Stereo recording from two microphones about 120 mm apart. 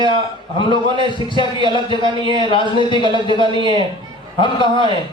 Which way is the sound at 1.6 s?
45° left (ahead or behind).